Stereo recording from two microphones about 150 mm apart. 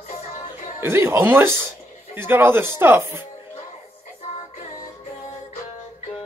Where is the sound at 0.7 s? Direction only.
15° right (ahead or behind).